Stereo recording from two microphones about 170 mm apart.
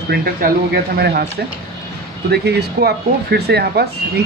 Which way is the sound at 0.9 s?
70° right (ahead or behind).